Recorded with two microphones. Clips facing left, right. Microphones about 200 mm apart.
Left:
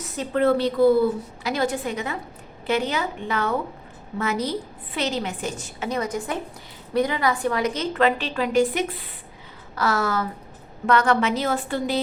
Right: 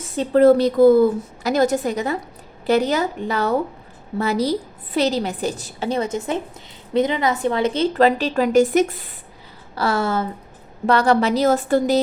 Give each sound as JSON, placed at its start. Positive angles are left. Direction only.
{"t": 0.2, "sound": "a woman's voice", "side_deg": -40}
{"t": 9.7, "sound": "a woman's voice", "side_deg": -30}